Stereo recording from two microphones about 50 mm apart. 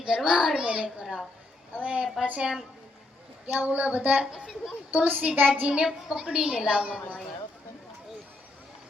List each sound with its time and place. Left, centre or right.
0.3 s a child's voice: centre; by 2.5 s right
3.6 s a woman's voice: right
4.3 s a child's voice: centre
4.9 s a woman's voice: right
5.7 s a child's voice: centre